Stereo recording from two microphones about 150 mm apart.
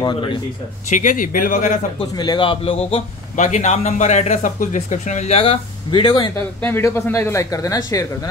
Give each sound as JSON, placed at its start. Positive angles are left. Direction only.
{"t": 0.0, "sound": "a man's voice", "side_deg": 35}
{"t": 0.8, "sound": "speech", "side_deg": 60}
{"t": 2.0, "sound": "a man's voice", "side_deg": 30}
{"t": 3.3, "sound": "speech", "side_deg": 55}
{"t": 6.3, "sound": "speech", "side_deg": 15}